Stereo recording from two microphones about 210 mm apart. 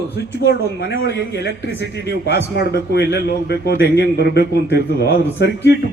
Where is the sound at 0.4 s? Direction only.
55° left (ahead or behind).